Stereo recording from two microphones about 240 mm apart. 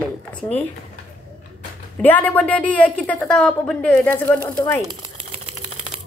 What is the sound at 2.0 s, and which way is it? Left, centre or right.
A woman's voice, centre.